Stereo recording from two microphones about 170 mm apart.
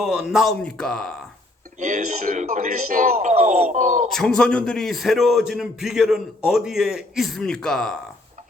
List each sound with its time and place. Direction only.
0.0 s a man's voice: 5° right (ahead or behind)
1.8 s speech: 50° right (ahead or behind)
4.1 s a man's voice: 5° left (ahead or behind)